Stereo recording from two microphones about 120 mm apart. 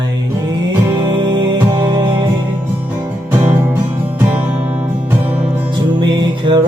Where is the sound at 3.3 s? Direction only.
15° right (ahead or behind).